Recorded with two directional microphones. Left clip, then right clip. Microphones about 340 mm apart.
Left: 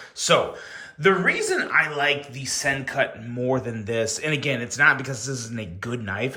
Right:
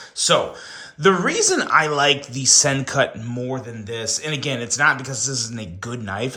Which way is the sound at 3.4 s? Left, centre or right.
Centre.